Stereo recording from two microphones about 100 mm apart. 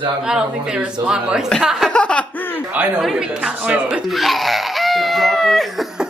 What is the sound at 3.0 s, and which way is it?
Speech, centre (ahead or behind).